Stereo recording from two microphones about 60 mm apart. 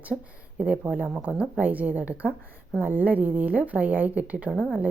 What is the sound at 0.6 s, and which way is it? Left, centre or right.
A woman's voice, right.